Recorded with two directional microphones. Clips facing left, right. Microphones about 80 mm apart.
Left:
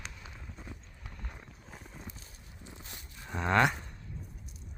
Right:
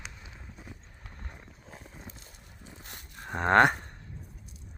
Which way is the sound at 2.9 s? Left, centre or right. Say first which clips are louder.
Right 6 dB; right.